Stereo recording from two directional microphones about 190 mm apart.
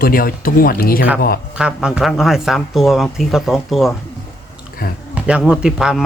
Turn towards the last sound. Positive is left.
turn(degrees=-5)  # may be behind; listen again after turning